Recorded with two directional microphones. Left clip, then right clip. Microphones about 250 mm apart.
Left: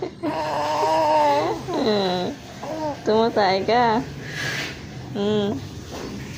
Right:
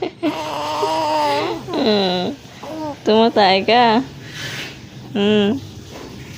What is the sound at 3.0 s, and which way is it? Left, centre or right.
Speech, right.